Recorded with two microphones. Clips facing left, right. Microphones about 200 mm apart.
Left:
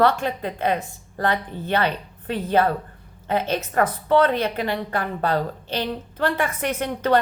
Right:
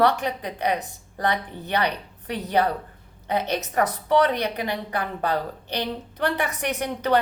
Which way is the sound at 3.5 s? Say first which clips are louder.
Left 2 dB; 15° right (ahead or behind).